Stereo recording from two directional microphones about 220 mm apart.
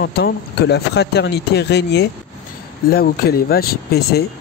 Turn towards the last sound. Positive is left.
turn(degrees=45)  # may be behind; listen again after turning